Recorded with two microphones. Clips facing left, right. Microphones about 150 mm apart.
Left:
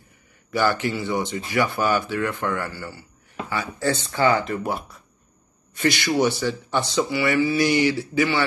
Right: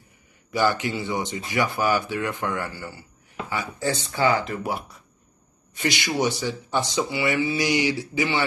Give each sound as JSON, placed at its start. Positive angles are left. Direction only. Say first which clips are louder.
{"t": 0.5, "sound": "speech", "louder": "left 1 dB", "side_deg": -15}
{"t": 4.3, "sound": "speech", "louder": "left 2 dB", "side_deg": -5}
{"t": 5.8, "sound": "speech", "louder": "left 4 dB", "side_deg": -15}